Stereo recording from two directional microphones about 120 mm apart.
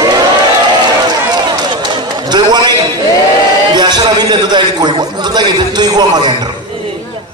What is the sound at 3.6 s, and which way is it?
A man's voice, 35° right (ahead or behind).